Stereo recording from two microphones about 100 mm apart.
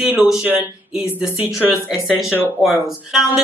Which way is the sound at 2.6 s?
Centre (ahead or behind).